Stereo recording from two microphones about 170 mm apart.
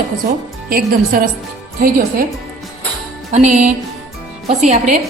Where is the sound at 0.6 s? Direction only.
60° right (ahead or behind).